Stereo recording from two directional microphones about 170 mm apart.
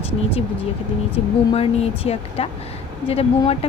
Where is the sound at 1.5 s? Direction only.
35° left (ahead or behind).